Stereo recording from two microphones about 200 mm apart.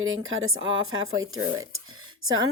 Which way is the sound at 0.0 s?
85° right.